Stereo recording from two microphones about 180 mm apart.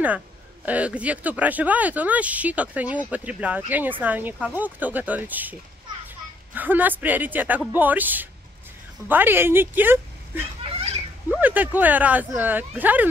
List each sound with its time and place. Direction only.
0.7 s speech: 5° right (ahead or behind)
10.7 s a sound: 35° right (ahead or behind)
11.2 s speech: 10° right (ahead or behind)